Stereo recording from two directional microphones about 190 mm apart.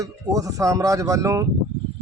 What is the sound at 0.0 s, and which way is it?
Speech, 15° right (ahead or behind).